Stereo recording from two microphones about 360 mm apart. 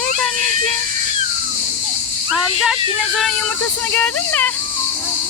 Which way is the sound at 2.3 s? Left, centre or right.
Centre.